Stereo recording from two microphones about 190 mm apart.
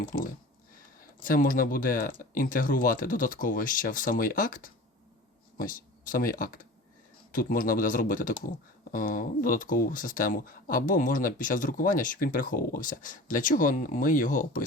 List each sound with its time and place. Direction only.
0.0 s speech: 50° left (ahead or behind)